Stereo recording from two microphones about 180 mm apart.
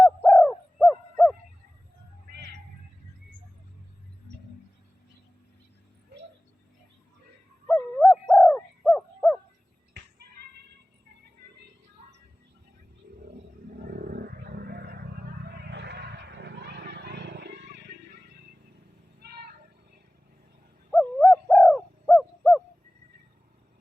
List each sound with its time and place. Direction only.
0.3 s bird: 5° left (ahead or behind)
7.7 s dog: centre (ahead or behind)
13.9 s vehicle: 60° right (ahead or behind)
15.7 s a sound: 70° right (ahead or behind)
20.9 s owl: 5° left (ahead or behind)